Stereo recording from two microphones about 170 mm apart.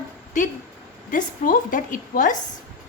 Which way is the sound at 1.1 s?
50° left (ahead or behind).